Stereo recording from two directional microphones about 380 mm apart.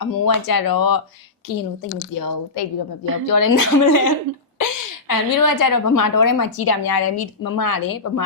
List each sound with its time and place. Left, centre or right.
0.0 s a woman's voice: left